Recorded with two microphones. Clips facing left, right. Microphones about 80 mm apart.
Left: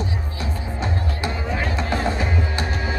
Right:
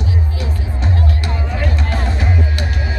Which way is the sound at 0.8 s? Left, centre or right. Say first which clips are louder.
Right 4 dB; left.